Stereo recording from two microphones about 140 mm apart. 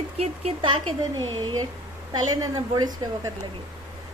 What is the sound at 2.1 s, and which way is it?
A woman's voice, 25° right (ahead or behind).